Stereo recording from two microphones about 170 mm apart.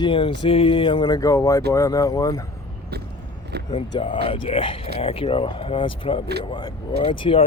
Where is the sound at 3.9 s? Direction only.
30° left (ahead or behind).